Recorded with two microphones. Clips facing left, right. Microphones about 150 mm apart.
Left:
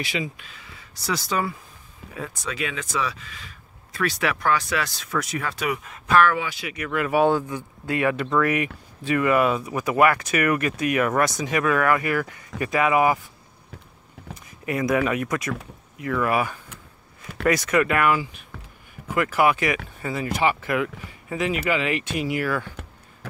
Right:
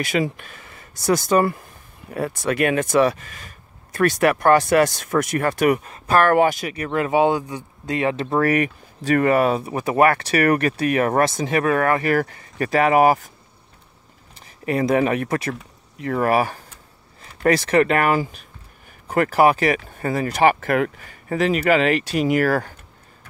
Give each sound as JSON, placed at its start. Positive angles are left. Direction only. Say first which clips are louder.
{"t": 0.0, "sound": "speech", "louder": "right 7 dB", "side_deg": -50}
{"t": 5.9, "sound": "speech", "louder": "right 1 dB", "side_deg": -35}
{"t": 6.2, "sound": "speech", "louder": "right 7 dB", "side_deg": -50}
{"t": 6.7, "sound": "speech", "louder": "right 3 dB", "side_deg": -30}
{"t": 8.3, "sound": "speech", "louder": "right 3 dB", "side_deg": -40}
{"t": 14.3, "sound": "a sound", "louder": "right 4 dB", "side_deg": -30}
{"t": 15.0, "sound": "speech", "louder": "right 3 dB", "side_deg": -35}
{"t": 20.0, "sound": "speech", "louder": "right 6 dB", "side_deg": -45}
{"t": 22.0, "sound": "speech", "louder": "right 7 dB", "side_deg": -40}